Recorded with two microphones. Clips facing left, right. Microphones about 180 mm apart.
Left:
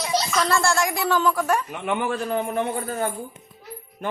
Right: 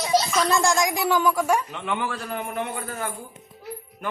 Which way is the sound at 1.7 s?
20° left (ahead or behind).